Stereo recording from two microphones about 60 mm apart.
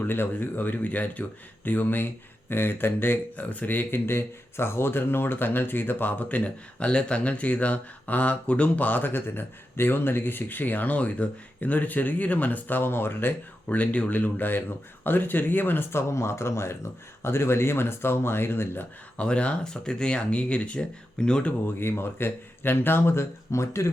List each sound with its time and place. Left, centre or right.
0.0 s speech: left
19.1 s speech: centre
21.8 s speech: left